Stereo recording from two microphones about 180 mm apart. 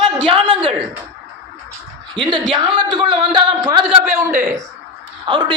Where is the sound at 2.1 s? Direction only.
25° right (ahead or behind).